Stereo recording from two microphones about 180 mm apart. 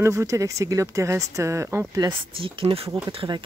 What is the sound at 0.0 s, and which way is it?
Speech, 15° right (ahead or behind).